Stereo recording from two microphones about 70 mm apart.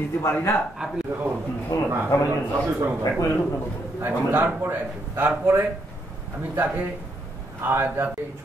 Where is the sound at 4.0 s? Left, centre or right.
Right.